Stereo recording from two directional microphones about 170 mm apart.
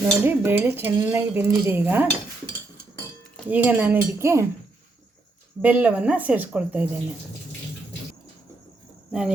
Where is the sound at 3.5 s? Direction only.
10° right (ahead or behind).